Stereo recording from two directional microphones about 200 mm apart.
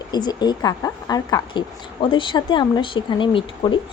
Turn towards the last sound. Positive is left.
turn(degrees=25)  # may be behind; listen again after turning